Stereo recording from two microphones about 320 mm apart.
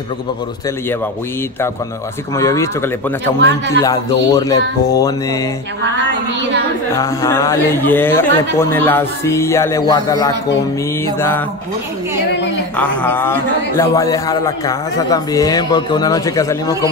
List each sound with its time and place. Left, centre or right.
2.3 s a man's voice: centre
3.3 s a man's voice: right
3.8 s a man's voice: centre
7.0 s a man's voice: centre
12.7 s a man's voice: centre